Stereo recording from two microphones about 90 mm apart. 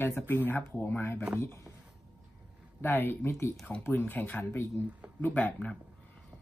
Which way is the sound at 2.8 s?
25° left (ahead or behind).